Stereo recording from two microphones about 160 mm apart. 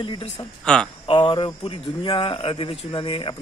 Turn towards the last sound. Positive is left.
turn(degrees=30)  # may be behind; listen again after turning